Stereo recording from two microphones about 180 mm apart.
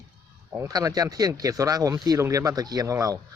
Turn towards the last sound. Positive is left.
turn(degrees=-20)  # may be behind; listen again after turning